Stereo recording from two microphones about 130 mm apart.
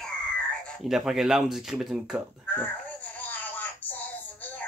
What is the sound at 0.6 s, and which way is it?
Speech, centre (ahead or behind).